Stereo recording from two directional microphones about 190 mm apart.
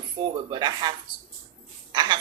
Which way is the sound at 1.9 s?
25° right (ahead or behind).